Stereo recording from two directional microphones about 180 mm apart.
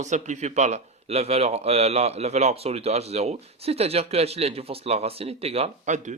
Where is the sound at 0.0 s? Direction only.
40° right (ahead or behind).